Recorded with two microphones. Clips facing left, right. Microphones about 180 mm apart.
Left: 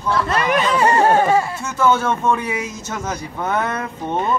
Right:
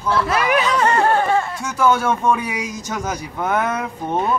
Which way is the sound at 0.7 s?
10° left (ahead or behind).